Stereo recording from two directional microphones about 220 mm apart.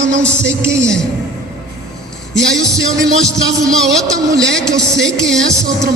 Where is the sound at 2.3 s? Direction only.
Centre (ahead or behind).